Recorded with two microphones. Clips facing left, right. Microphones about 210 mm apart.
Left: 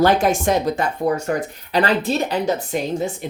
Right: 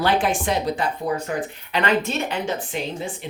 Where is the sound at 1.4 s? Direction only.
35° left (ahead or behind).